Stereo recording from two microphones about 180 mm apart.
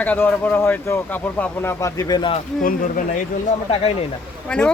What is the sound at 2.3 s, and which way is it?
Speech, 50° left (ahead or behind).